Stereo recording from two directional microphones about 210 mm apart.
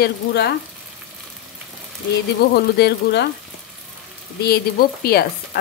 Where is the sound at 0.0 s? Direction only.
50° left (ahead or behind).